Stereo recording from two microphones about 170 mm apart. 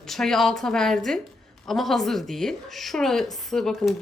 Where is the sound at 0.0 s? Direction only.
5° left (ahead or behind).